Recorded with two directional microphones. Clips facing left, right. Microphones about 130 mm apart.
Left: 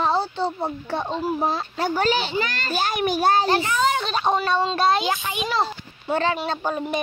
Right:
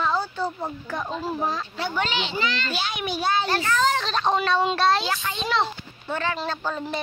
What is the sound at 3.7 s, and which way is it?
Speech, 5° left (ahead or behind).